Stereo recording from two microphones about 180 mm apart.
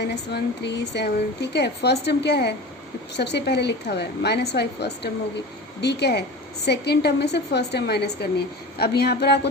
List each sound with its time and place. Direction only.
0.0 s speech: 70° left (ahead or behind)